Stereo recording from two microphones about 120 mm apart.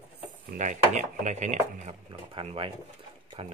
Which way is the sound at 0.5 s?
90° right.